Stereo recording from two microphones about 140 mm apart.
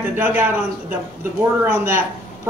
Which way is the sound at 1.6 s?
15° right (ahead or behind).